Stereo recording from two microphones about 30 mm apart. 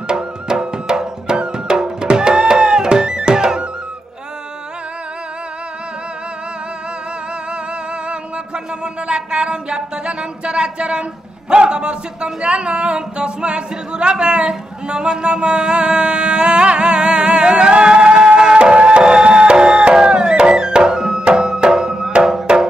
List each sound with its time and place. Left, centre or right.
0.1 s music: right
9.0 s a sound: right
21.2 s music: right
22.5 s music: right